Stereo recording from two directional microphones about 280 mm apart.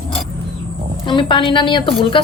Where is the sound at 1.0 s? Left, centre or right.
Centre.